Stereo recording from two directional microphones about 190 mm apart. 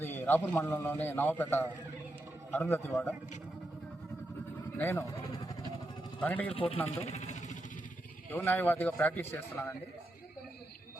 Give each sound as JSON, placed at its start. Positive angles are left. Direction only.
{"t": 0.0, "sound": "a man's voice", "side_deg": 10}
{"t": 4.8, "sound": "a man's voice", "side_deg": 10}
{"t": 6.1, "sound": "a man's voice", "side_deg": 10}
{"t": 6.5, "sound": "speech", "side_deg": 30}
{"t": 6.9, "sound": "vehicle", "side_deg": 35}
{"t": 8.3, "sound": "a man's voice", "side_deg": 10}